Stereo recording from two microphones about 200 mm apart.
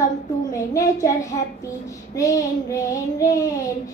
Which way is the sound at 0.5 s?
15° left (ahead or behind).